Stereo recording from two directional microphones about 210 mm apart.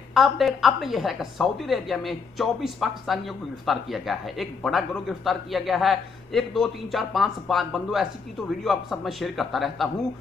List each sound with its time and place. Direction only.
0.1 s a woman's voice: centre (ahead or behind)